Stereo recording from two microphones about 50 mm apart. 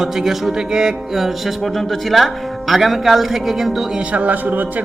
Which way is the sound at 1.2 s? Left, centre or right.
Centre.